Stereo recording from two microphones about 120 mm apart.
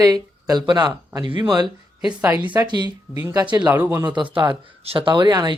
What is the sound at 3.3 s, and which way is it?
Speech, 35° right (ahead or behind).